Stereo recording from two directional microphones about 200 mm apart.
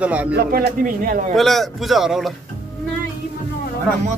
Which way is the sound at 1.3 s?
Centre (ahead or behind).